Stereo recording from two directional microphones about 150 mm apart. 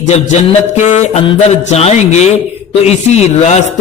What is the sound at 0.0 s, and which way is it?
Mantra, 50° left (ahead or behind).